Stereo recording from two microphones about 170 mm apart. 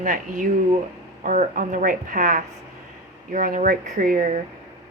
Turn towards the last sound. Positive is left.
turn(degrees=-55)  # may be behind; listen again after turning